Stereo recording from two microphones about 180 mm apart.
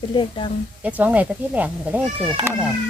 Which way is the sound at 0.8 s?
10° right (ahead or behind).